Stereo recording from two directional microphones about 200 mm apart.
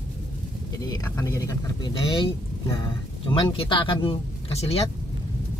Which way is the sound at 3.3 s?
25° left (ahead or behind).